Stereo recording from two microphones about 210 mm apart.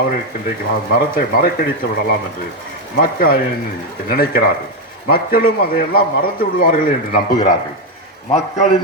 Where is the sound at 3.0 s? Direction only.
45° left (ahead or behind).